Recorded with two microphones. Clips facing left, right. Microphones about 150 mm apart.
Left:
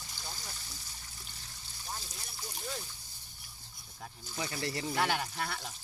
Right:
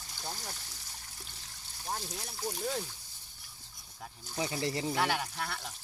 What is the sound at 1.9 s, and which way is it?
Speech, 65° right (ahead or behind).